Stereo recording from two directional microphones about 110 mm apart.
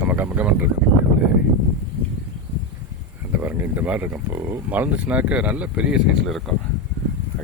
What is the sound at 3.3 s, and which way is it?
Speech, 15° right (ahead or behind).